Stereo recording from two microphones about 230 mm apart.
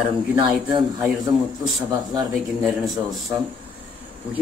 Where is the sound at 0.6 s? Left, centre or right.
Centre.